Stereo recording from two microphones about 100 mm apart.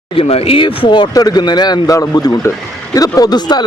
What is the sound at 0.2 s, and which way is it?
Speech, 85° left.